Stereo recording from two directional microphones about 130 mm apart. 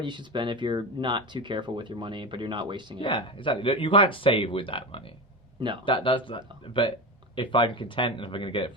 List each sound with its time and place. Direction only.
0.0 s speech: 35° right (ahead or behind)
3.0 s speech: 40° left (ahead or behind)
5.5 s speech: 35° right (ahead or behind)
5.8 s speech: 40° left (ahead or behind)